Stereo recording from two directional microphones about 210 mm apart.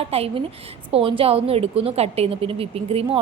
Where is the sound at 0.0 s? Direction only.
30° right (ahead or behind).